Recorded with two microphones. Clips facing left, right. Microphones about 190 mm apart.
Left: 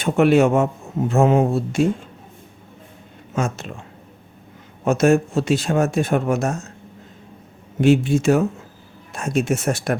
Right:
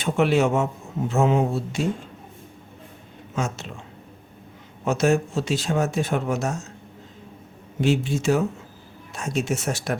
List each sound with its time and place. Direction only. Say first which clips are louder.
0.0 s a man's voice: left 5 dB; 55° left (ahead or behind)
3.3 s a man's voice: left 4 dB; 50° left (ahead or behind)
4.9 s speech: left 5 dB; 50° left (ahead or behind)
7.8 s speech: left 6 dB; 55° left (ahead or behind)